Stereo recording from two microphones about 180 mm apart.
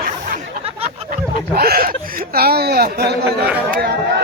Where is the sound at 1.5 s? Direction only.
55° right (ahead or behind).